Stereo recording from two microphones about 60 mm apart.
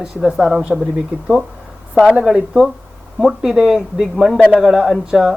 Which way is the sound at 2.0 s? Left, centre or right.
Centre.